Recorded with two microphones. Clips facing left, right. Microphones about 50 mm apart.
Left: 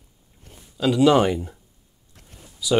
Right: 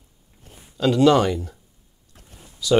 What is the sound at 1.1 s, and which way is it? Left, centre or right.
Speech, centre.